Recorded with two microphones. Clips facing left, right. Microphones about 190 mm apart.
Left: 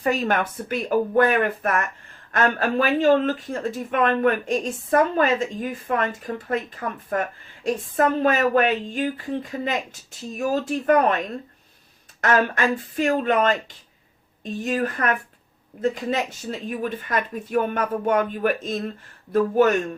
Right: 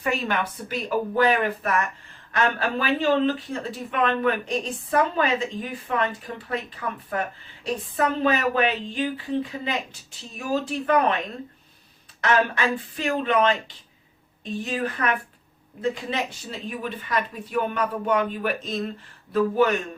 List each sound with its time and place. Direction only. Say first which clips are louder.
0.0 s speech: left 4 dB; 40° left (ahead or behind)
10.3 s speech: left 3 dB; 45° left (ahead or behind)
12.2 s speech: left 2 dB; 45° left (ahead or behind)